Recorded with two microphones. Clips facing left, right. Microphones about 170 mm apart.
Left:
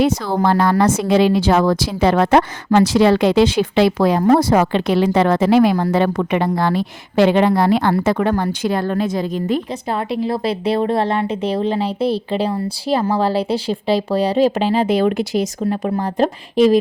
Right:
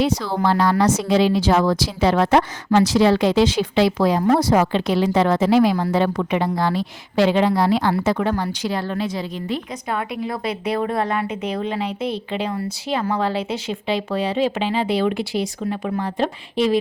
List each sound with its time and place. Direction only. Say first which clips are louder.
0.0 s a woman's voice: left 3 dB; 50° left (ahead or behind)
9.9 s a woman's voice: left 5 dB; 30° left (ahead or behind)